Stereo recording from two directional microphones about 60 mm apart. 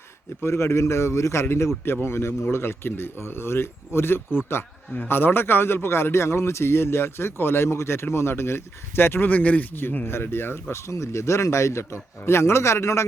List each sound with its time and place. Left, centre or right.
0.4 s a man's voice: left
1.8 s a man's voice: left